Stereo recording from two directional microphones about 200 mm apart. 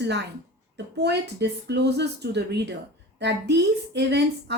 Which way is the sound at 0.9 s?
55° right (ahead or behind).